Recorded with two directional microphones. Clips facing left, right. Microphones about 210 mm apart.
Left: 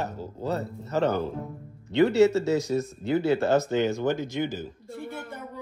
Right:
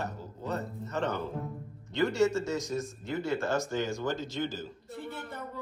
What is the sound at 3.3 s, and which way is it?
Speech, 65° left (ahead or behind).